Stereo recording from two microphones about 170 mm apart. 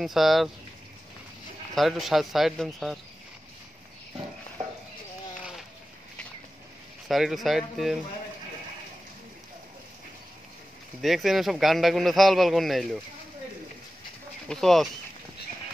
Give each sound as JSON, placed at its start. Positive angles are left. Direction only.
{"t": 0.0, "sound": "a man's voice", "side_deg": 0}
{"t": 1.8, "sound": "a man's voice", "side_deg": 0}
{"t": 5.4, "sound": "sheep", "side_deg": -5}
{"t": 7.1, "sound": "a man's voice", "side_deg": 0}
{"t": 11.0, "sound": "a man's voice", "side_deg": 0}
{"t": 14.5, "sound": "a man's voice", "side_deg": 0}